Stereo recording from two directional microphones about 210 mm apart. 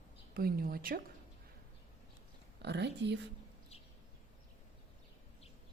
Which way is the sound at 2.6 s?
55° right (ahead or behind).